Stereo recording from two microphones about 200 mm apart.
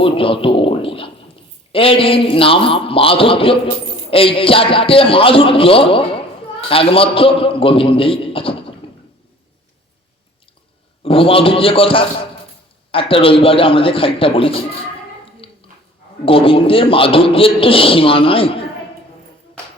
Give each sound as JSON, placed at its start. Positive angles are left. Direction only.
{"t": 0.0, "sound": "a man's voice", "side_deg": 25}
{"t": 11.0, "sound": "a man's voice", "side_deg": 25}
{"t": 15.4, "sound": "dog", "side_deg": 25}
{"t": 16.2, "sound": "a man's voice", "side_deg": 25}